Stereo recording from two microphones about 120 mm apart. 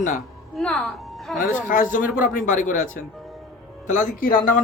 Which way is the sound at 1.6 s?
90° left.